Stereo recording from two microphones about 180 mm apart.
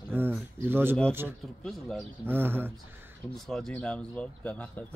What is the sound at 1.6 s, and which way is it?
Speech, 5° left (ahead or behind).